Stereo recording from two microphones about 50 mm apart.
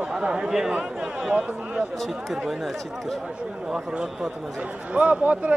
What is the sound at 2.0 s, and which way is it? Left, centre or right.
Speech, centre.